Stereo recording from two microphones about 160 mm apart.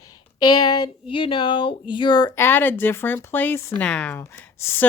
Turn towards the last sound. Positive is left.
turn(degrees=15)  # may be behind; listen again after turning